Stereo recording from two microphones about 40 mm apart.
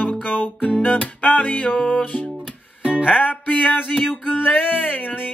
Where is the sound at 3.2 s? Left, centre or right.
Left.